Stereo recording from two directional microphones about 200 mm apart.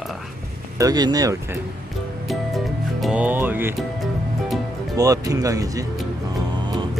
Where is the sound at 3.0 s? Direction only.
5° right (ahead or behind).